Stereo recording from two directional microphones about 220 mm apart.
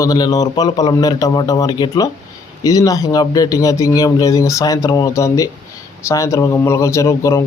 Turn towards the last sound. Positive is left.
turn(degrees=15)  # may be behind; listen again after turning